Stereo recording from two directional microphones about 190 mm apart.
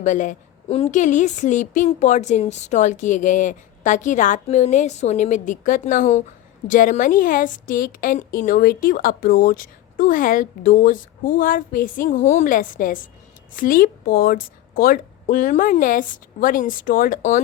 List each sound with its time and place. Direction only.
0.0 s a woman's voice: 40° left (ahead or behind)